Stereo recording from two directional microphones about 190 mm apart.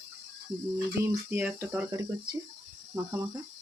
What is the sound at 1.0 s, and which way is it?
Speech, 15° right (ahead or behind).